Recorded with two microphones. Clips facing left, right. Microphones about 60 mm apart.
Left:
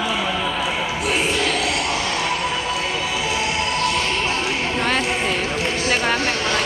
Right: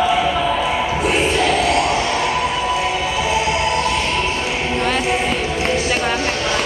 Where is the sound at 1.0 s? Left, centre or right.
Right.